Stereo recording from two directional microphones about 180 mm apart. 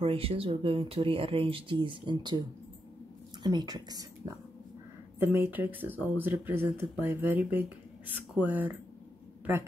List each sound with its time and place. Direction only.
0.0 s speech: 30° right (ahead or behind)
3.4 s speech: 20° right (ahead or behind)
5.2 s speech: 10° right (ahead or behind)